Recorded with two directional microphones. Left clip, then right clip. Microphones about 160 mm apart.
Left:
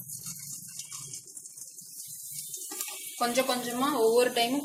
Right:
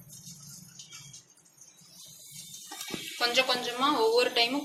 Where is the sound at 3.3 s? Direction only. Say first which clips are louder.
Right 3 dB; 50° left (ahead or behind).